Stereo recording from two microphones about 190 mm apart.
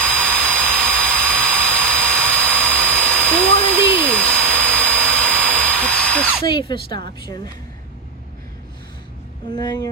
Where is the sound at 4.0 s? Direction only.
5° left (ahead or behind).